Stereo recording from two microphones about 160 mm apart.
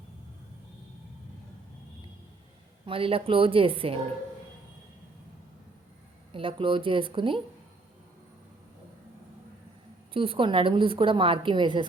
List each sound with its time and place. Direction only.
2.8 s a woman's voice: 35° right (ahead or behind)
6.3 s a woman's voice: 35° right (ahead or behind)
10.1 s a woman's voice: 35° right (ahead or behind)